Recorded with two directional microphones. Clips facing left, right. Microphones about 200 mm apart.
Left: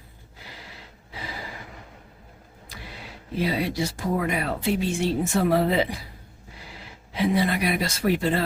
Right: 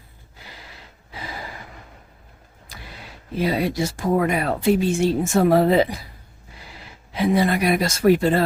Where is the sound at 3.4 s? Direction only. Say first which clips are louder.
Right 4 dB; 50° right (ahead or behind).